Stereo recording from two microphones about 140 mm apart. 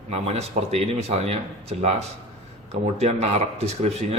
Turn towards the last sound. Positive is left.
turn(degrees=-50)  # may be behind; listen again after turning